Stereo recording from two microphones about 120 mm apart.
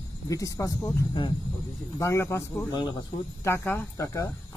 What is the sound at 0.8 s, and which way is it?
Speech, 15° left (ahead or behind).